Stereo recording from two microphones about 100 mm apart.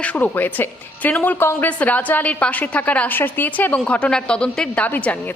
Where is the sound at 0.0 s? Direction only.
15° left (ahead or behind).